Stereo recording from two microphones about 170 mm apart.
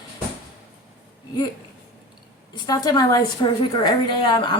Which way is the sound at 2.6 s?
20° left (ahead or behind).